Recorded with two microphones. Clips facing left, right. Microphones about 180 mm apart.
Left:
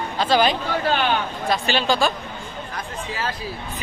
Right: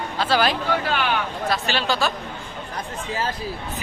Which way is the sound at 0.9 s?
30° left (ahead or behind).